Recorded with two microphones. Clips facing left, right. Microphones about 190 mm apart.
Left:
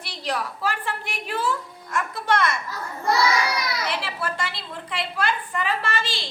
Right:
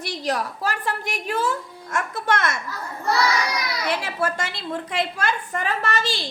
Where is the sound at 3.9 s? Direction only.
45° right (ahead or behind).